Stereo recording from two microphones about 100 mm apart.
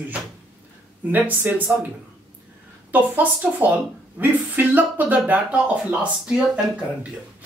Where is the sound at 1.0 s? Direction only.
20° right (ahead or behind).